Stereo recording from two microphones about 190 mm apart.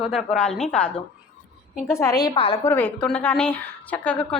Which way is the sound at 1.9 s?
20° left (ahead or behind).